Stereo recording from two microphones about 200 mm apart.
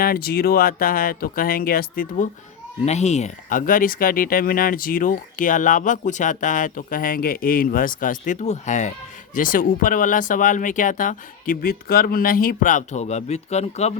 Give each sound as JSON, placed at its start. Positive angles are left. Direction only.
{"t": 0.0, "sound": "speech", "side_deg": 50}
{"t": 2.8, "sound": "speech", "side_deg": 35}